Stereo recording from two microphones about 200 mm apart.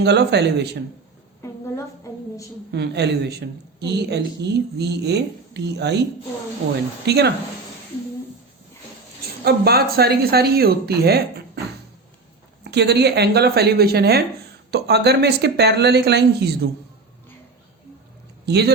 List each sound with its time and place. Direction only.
0.0 s a woman's voice: 60° right (ahead or behind)
1.4 s a sound: 15° left (ahead or behind)
2.7 s a woman's voice: 55° right (ahead or behind)
7.0 s a woman's voice: 55° right (ahead or behind)
9.4 s speech: 50° right (ahead or behind)
12.6 s a woman's voice: 55° right (ahead or behind)
18.4 s speech: 55° right (ahead or behind)